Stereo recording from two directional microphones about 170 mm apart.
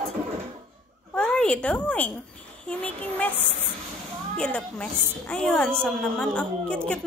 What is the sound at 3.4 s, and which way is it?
Speech, 40° right (ahead or behind).